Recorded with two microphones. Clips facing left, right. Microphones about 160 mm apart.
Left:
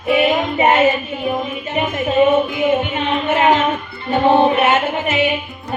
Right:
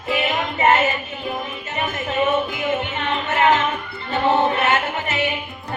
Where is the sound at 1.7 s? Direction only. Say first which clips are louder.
Left 7 dB; 20° left (ahead or behind).